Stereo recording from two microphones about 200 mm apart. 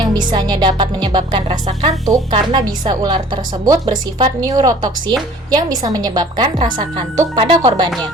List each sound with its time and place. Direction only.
0.0 s music: 20° right (ahead or behind)